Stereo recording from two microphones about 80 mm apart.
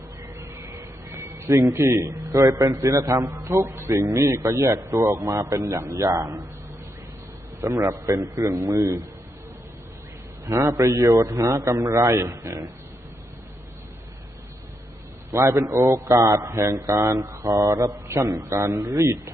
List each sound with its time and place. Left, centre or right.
0.3 s a man's voice: right
7.6 s a man's voice: right
10.4 s a man's voice: right
15.4 s a man's voice: right
18.3 s a man's voice: right
18.7 s a man's voice: right